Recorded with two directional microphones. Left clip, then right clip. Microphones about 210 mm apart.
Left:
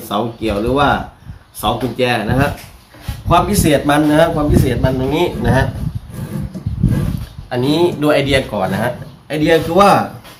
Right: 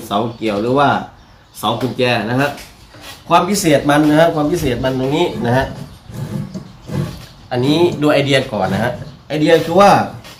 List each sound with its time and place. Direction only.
0.0 s speech: 5° left (ahead or behind)
7.5 s speech: 5° left (ahead or behind)